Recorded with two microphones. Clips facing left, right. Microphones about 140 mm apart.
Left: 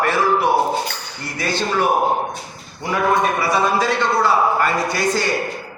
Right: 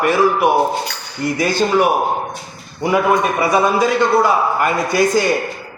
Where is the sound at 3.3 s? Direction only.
15° right (ahead or behind).